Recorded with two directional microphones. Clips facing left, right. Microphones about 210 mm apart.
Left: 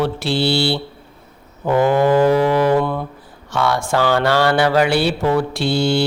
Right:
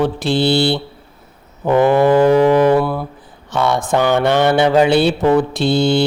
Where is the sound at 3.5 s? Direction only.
20° right (ahead or behind).